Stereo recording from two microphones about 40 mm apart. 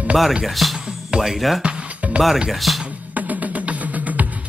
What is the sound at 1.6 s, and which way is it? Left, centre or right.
Music, right.